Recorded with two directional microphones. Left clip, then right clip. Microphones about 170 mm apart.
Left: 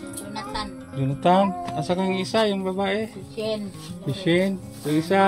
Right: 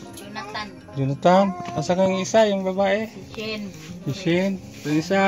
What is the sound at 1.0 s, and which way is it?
Speech, 30° right (ahead or behind).